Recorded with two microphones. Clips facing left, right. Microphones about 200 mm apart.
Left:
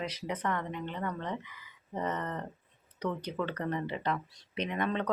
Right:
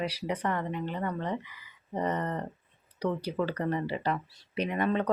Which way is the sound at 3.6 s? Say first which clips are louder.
Right 3 dB; 10° right (ahead or behind).